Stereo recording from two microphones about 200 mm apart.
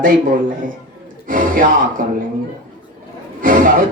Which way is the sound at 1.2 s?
45° right (ahead or behind).